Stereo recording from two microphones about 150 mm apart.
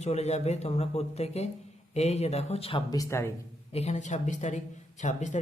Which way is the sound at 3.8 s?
50° left (ahead or behind).